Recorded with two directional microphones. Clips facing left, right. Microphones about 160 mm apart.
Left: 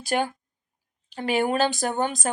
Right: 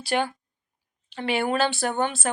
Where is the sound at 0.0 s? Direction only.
45° left (ahead or behind).